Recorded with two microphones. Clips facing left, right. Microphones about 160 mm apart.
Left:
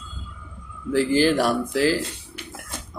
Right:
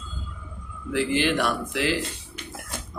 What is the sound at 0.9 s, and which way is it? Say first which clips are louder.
A man's voice: left 5 dB; 35° left (ahead or behind).